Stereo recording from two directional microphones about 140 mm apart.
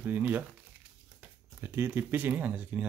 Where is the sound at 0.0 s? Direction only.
15° right (ahead or behind).